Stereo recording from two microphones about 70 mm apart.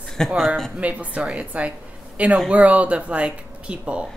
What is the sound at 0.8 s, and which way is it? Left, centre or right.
A woman's voice, right.